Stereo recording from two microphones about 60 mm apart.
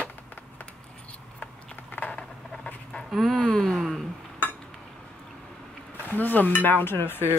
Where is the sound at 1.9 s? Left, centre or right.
Left.